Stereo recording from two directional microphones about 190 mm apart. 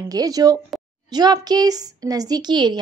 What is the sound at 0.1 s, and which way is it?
A woman's voice, 20° right (ahead or behind).